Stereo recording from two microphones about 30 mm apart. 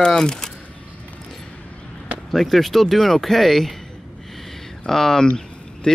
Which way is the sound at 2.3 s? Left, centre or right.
Centre.